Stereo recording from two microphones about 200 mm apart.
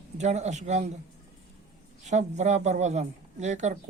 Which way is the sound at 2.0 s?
35° right (ahead or behind).